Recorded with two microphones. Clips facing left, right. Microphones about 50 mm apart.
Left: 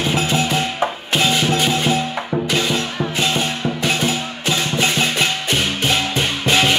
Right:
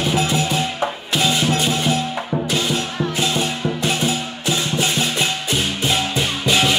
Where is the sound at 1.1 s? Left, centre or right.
Left.